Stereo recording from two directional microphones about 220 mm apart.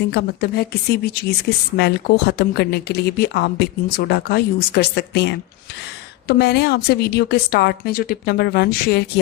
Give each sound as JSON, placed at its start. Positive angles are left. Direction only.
{"t": 0.1, "sound": "speech", "side_deg": 45}